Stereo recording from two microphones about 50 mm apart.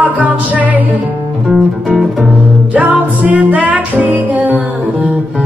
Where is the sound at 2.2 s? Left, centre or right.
Right.